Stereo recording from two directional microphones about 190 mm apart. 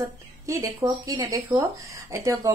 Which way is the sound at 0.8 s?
15° right (ahead or behind).